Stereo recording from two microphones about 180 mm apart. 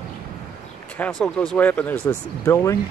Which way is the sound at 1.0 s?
10° left (ahead or behind).